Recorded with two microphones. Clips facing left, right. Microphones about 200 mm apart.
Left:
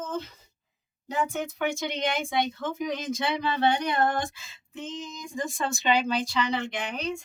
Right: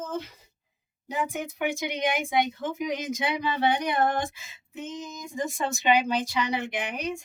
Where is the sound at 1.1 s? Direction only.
15° right (ahead or behind).